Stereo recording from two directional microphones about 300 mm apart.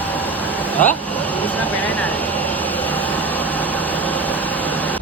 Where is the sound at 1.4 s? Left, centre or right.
Centre.